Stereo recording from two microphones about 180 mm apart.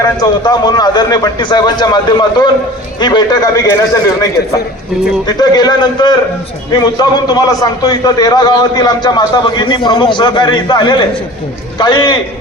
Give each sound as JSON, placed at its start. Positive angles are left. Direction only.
{"t": 0.2, "sound": "a man's voice", "side_deg": 25}
{"t": 5.2, "sound": "a man's voice", "side_deg": 25}